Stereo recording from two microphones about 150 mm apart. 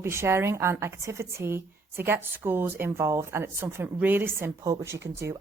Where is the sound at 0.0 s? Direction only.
15° right (ahead or behind).